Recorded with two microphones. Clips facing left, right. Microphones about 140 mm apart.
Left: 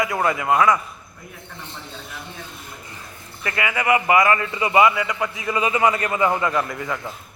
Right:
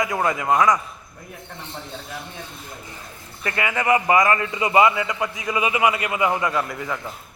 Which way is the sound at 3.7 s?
25° right (ahead or behind).